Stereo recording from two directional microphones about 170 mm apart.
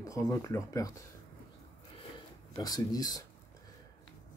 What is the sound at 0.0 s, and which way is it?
Speech, 20° left (ahead or behind).